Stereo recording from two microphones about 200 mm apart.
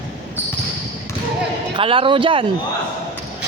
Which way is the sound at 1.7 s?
25° right (ahead or behind).